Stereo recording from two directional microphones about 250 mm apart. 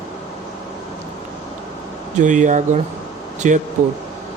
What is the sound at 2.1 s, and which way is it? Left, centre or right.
Speech, right.